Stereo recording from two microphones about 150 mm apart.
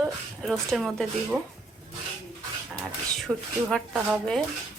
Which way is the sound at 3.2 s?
Centre (ahead or behind).